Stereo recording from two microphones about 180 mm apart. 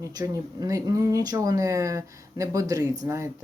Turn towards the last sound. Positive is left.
turn(degrees=-15)  # may be behind; listen again after turning